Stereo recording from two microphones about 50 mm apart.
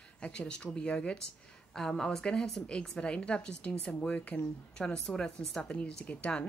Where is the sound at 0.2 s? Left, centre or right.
Centre.